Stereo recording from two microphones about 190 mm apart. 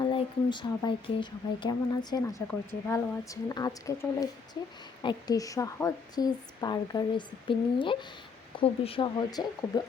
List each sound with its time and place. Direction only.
0.0 s a woman's voice: 25° left (ahead or behind)